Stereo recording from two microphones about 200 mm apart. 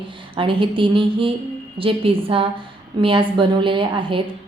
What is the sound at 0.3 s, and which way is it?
A woman's voice, 25° right (ahead or behind).